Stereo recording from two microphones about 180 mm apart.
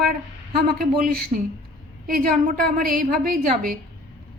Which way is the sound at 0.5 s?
55° right (ahead or behind).